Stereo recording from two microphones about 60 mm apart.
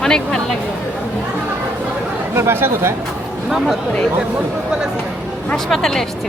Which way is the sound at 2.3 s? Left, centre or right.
Right.